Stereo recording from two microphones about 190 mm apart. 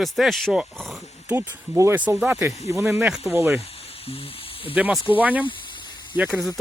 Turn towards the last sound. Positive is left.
turn(degrees=-5)  # may be behind; listen again after turning